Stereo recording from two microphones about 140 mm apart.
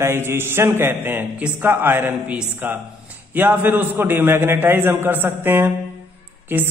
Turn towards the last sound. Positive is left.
turn(degrees=-15)  # may be behind; listen again after turning